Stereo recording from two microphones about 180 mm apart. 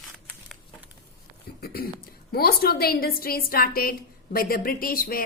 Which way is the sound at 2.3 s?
55° left (ahead or behind).